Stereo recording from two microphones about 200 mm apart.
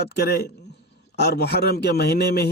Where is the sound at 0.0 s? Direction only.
55° left (ahead or behind).